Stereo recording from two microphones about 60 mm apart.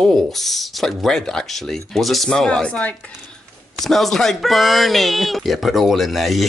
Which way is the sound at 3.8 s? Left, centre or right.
Centre.